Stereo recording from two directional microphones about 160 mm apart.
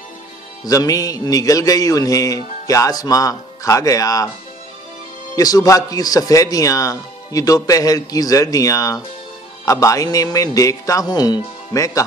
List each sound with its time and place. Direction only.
0.7 s a man's voice: 20° left (ahead or behind)
5.3 s a man's voice: 20° left (ahead or behind)